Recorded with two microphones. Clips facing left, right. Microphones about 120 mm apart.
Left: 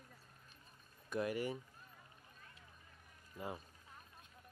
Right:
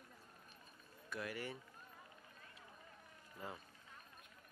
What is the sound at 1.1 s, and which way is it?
Speech, 20° left (ahead or behind).